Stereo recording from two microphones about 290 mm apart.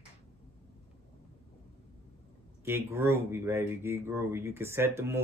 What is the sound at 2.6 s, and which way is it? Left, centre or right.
Speech, centre.